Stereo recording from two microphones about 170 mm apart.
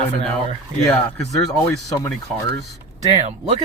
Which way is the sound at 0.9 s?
15° left (ahead or behind).